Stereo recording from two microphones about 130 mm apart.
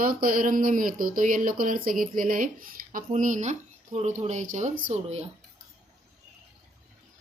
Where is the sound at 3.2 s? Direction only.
75° right (ahead or behind).